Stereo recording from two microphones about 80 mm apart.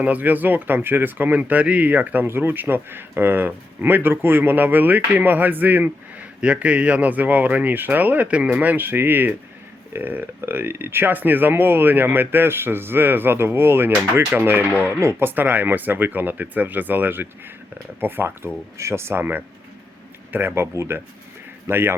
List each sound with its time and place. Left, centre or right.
0.0 s speech: right